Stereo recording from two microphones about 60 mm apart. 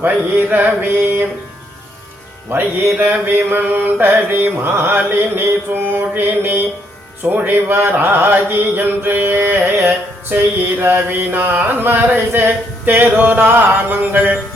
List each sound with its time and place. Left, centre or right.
0.0 s music: right
2.5 s speech: right